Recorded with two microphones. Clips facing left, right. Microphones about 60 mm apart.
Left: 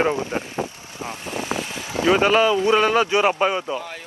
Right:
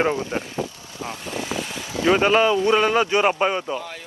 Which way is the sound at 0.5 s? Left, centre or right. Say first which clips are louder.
Left 1 dB; left.